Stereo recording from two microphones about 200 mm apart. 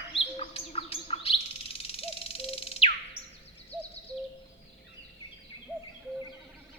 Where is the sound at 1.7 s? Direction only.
30° left (ahead or behind).